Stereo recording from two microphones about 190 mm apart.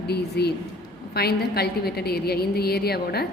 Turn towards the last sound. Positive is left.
turn(degrees=55)  # may be behind; listen again after turning